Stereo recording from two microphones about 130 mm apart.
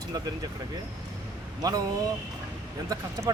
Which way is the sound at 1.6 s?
30° right (ahead or behind).